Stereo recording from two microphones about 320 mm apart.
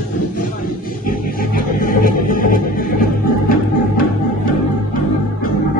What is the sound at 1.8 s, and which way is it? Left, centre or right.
Music, left.